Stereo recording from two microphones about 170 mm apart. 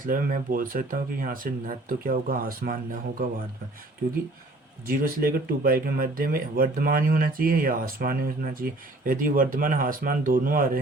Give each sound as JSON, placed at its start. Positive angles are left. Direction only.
{"t": 0.0, "sound": "speech", "side_deg": -55}
{"t": 4.9, "sound": "speech", "side_deg": -60}